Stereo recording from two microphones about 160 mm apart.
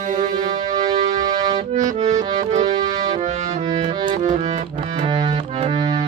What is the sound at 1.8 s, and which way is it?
Accordion, 45° right (ahead or behind).